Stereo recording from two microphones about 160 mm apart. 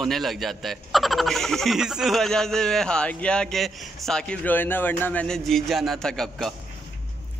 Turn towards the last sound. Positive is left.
turn(degrees=0)  # may be behind; listen again after turning